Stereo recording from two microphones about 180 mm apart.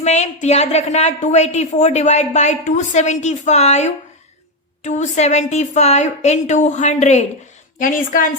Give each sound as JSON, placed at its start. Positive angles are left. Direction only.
{"t": 0.0, "sound": "a woman's voice", "side_deg": 40}